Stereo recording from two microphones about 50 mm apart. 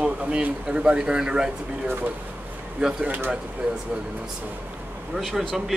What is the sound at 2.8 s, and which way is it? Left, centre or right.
Speech, centre.